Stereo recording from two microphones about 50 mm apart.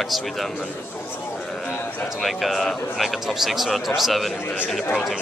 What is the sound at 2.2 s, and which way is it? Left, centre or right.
Speech, centre.